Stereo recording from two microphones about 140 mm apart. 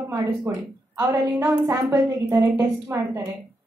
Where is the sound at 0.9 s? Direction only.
25° right (ahead or behind).